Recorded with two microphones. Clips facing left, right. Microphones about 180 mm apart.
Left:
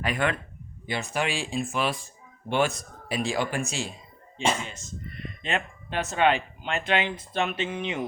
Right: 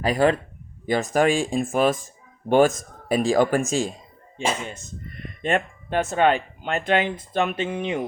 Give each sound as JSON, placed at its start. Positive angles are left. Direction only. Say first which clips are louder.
{"t": 0.0, "sound": "speech", "louder": "right 8 dB", "side_deg": -35}
{"t": 5.4, "sound": "speech", "louder": "right 7 dB", "side_deg": -50}